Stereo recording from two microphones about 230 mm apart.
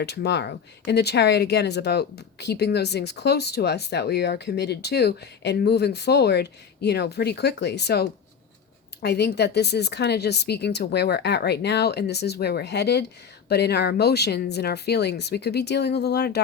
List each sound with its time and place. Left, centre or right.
0.0 s speech: left